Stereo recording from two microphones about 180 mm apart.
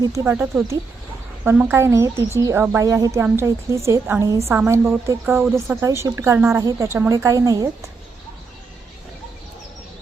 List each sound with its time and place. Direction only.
0.0 s a woman's voice: 15° right (ahead or behind)